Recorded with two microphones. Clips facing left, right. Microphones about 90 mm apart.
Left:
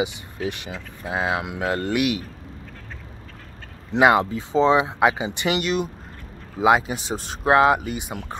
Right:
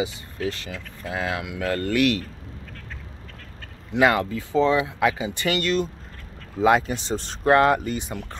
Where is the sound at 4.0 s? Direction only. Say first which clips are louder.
Left 3 dB; 20° left (ahead or behind).